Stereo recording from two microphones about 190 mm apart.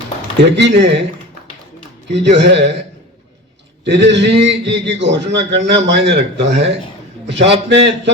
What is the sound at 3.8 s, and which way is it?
A man's voice, 65° right (ahead or behind).